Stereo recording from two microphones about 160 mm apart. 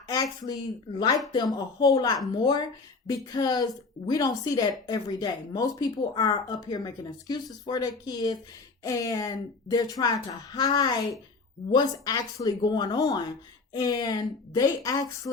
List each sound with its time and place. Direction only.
0.1 s speech: 25° left (ahead or behind)